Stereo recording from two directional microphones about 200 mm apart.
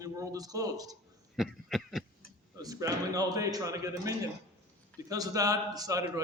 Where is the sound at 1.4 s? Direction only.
Centre (ahead or behind).